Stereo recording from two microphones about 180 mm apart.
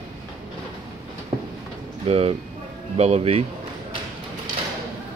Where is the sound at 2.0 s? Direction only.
35° right (ahead or behind).